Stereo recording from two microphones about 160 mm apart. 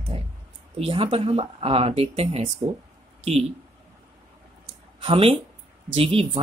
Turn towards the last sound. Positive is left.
turn(degrees=-35)  # may be behind; listen again after turning